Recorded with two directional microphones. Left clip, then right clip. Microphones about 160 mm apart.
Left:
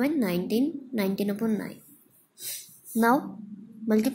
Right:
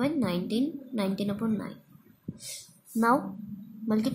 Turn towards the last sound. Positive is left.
turn(degrees=15)  # may be behind; listen again after turning